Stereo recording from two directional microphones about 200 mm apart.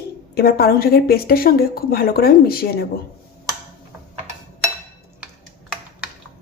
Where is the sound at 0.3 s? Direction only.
50° left (ahead or behind).